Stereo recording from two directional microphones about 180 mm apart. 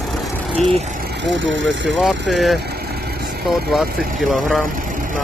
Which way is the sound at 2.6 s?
60° right (ahead or behind).